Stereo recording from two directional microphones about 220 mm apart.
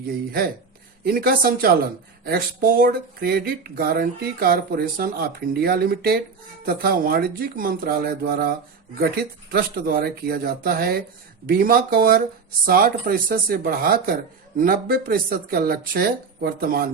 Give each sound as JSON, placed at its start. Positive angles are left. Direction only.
{"t": 1.0, "sound": "speech", "side_deg": -45}